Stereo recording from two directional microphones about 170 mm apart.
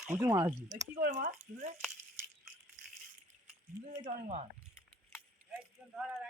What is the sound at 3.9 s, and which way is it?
Speech, 40° right (ahead or behind).